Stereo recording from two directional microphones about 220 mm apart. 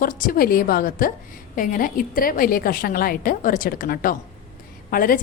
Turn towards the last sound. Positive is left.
turn(degrees=40)  # may be behind; listen again after turning